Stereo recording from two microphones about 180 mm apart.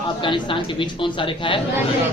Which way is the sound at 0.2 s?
25° left (ahead or behind).